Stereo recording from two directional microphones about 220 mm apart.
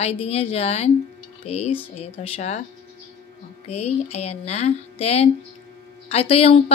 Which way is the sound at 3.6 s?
30° left (ahead or behind).